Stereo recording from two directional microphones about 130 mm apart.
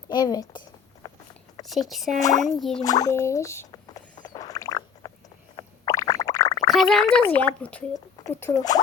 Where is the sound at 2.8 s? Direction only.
30° left (ahead or behind).